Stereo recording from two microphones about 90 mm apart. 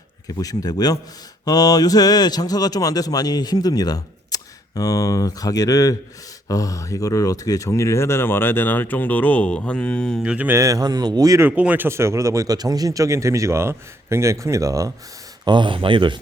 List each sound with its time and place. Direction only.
0.3 s speech: 45° left (ahead or behind); by 10.2 s 10° left (ahead or behind)
10.2 s mantra: 15° right (ahead or behind)
10.5 s speech: 35° right (ahead or behind)
11.3 s speech: 20° right (ahead or behind); by 14.9 s 35° right (ahead or behind)
15.4 s speech: 65° right (ahead or behind)